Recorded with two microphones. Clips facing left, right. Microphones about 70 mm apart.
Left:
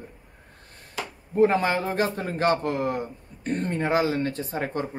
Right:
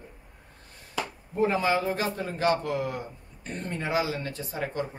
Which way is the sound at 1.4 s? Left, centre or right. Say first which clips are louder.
Left 4 dB; left.